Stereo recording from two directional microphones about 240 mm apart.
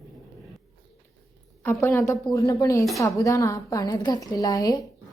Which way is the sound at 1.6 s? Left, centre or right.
Centre.